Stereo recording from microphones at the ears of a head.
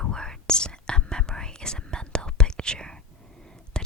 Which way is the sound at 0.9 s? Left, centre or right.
Centre.